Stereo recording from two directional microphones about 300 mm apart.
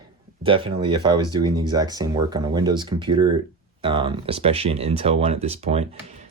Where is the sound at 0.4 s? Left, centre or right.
Centre.